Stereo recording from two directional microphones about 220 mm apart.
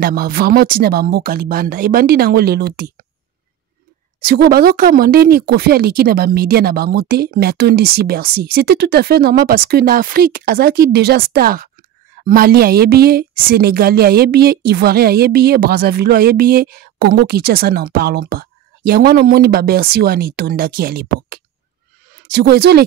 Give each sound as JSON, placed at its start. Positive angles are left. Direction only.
{"t": 0.0, "sound": "a woman's voice", "side_deg": -45}
{"t": 4.2, "sound": "a woman's voice", "side_deg": -45}